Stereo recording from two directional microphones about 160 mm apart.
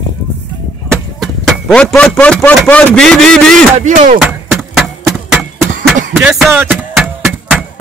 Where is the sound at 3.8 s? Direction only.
50° right (ahead or behind).